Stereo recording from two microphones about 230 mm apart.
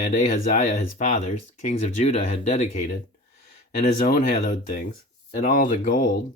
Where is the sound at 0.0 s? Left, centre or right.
Left.